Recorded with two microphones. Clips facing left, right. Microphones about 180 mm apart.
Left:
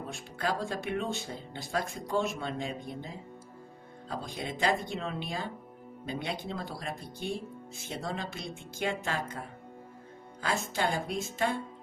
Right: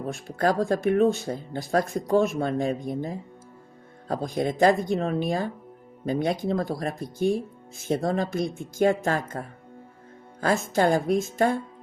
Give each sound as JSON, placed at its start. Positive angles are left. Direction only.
{"t": 0.1, "sound": "speech", "side_deg": -45}
{"t": 4.1, "sound": "speech", "side_deg": -45}
{"t": 10.4, "sound": "speech", "side_deg": -45}